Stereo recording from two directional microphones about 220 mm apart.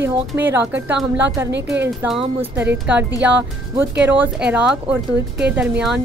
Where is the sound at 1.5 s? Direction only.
50° right (ahead or behind).